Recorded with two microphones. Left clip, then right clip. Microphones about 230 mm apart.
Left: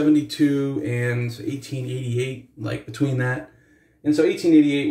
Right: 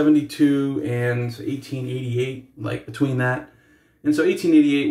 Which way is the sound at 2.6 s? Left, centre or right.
Centre.